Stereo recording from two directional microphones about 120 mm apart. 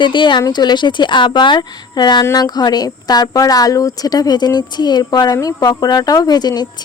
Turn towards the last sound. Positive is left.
turn(degrees=35)  # may be behind; listen again after turning